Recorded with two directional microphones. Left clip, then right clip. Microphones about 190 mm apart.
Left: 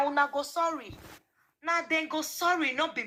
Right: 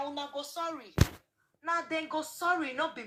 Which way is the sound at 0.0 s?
30° left (ahead or behind).